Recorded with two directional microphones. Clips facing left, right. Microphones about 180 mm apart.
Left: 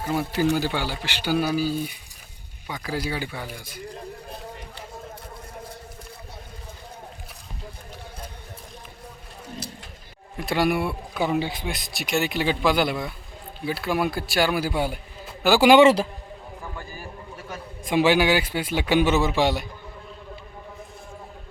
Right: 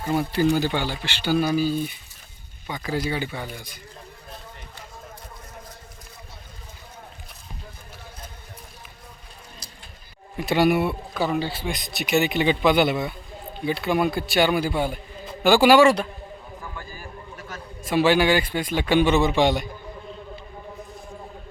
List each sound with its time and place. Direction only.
0.0 s a man's voice: 5° left (ahead or behind)
10.3 s a man's voice: centre (ahead or behind)
11.3 s a man's voice: 15° left (ahead or behind)
11.6 s a man's voice: centre (ahead or behind)
15.6 s a man's voice: 20° left (ahead or behind)
17.5 s a man's voice: 15° left (ahead or behind)